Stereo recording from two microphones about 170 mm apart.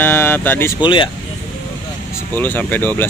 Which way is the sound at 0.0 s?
10° left (ahead or behind).